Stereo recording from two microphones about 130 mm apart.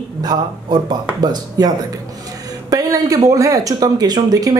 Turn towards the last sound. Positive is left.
turn(degrees=-30)  # may be behind; listen again after turning